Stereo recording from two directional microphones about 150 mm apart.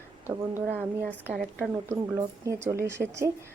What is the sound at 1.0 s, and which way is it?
Speech, 10° left (ahead or behind).